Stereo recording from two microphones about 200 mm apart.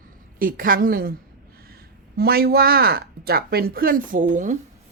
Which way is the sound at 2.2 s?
50° right (ahead or behind).